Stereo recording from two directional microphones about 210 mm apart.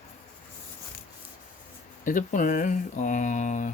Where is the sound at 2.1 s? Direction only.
40° left (ahead or behind).